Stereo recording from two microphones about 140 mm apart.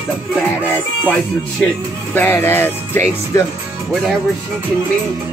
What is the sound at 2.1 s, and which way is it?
Speech, 15° left (ahead or behind).